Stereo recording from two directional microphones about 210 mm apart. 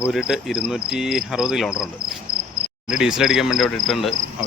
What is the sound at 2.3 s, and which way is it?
Cricket, 90° right.